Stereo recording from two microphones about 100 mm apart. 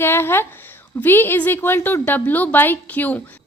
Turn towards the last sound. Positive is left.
turn(degrees=15)  # may be behind; listen again after turning